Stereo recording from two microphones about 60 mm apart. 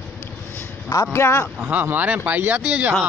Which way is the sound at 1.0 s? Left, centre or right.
Left.